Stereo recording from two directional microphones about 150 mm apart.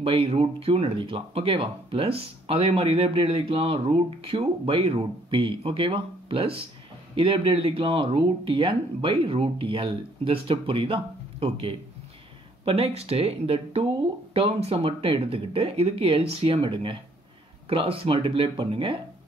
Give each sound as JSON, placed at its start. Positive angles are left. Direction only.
{"t": 0.0, "sound": "speech", "side_deg": -40}